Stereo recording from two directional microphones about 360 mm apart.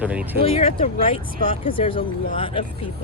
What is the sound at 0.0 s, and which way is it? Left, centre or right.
Speech, centre.